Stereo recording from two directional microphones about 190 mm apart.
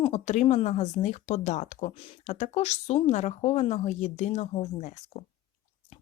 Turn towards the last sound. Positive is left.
turn(degrees=40)  # may be behind; listen again after turning